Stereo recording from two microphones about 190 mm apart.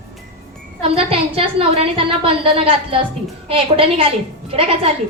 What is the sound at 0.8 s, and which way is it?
A woman's voice, 30° right (ahead or behind).